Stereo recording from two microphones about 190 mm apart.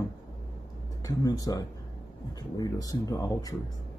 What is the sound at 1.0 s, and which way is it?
Speech, 20° left (ahead or behind).